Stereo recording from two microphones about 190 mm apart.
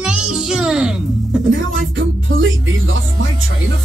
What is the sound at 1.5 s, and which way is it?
Speech, 90° right.